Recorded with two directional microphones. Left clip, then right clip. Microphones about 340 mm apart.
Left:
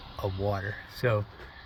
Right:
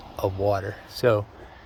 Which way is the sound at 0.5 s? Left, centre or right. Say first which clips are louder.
Right 5 dB; centre.